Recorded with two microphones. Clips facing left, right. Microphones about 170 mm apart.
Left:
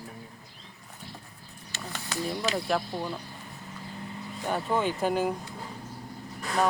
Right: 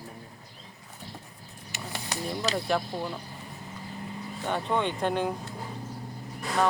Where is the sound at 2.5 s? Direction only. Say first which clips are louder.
Right 3 dB; centre (ahead or behind).